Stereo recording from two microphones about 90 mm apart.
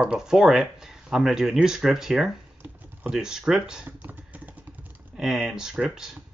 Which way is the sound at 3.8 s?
20° right (ahead or behind).